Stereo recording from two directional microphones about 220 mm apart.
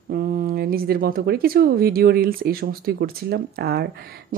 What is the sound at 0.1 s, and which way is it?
Speech, 40° right (ahead or behind).